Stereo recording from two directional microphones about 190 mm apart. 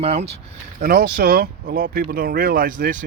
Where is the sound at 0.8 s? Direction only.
50° right (ahead or behind).